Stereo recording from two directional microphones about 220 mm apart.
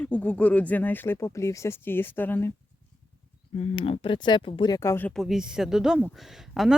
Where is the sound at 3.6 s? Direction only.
25° left (ahead or behind); by 6.7 s centre (ahead or behind).